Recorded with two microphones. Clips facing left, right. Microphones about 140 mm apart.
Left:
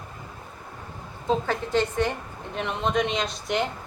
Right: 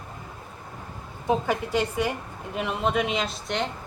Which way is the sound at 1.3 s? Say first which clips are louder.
Even; 10° right (ahead or behind).